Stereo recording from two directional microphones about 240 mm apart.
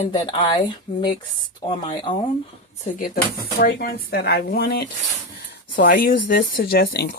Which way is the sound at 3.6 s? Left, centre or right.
Left.